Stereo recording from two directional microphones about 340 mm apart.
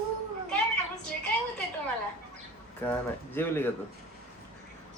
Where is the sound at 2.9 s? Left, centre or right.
Centre.